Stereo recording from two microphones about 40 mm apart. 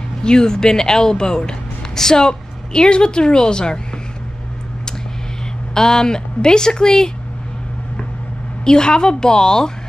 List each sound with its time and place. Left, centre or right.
0.2 s speech: centre
5.8 s speech: centre
8.6 s a woman's voice: centre